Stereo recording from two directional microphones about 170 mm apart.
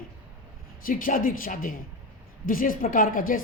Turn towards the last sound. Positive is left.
turn(degrees=55)  # may be behind; listen again after turning